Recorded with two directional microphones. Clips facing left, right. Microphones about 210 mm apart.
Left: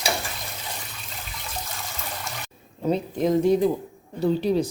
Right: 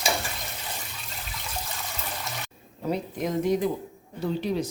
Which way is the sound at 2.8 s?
25° left (ahead or behind).